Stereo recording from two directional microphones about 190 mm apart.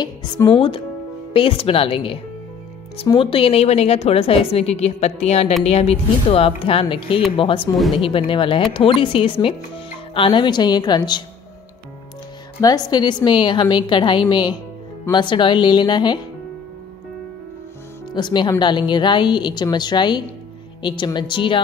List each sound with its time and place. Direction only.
0.0 s a woman's voice: 20° left (ahead or behind)
12.5 s a woman's voice: 20° left (ahead or behind)
18.1 s a woman's voice: 25° left (ahead or behind)